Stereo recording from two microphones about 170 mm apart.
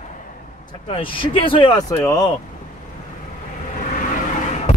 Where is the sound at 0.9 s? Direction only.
30° left (ahead or behind).